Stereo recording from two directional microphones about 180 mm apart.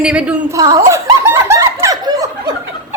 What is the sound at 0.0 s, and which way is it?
Speech, 5° right (ahead or behind).